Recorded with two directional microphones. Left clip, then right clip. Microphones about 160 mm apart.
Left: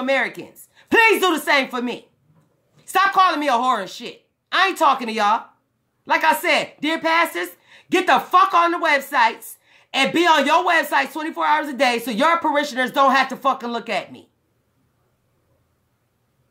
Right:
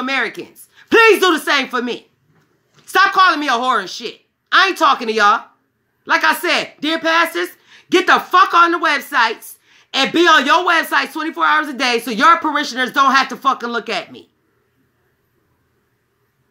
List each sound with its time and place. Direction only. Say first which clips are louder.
0.0 s speech: right 1 dB; 15° left (ahead or behind)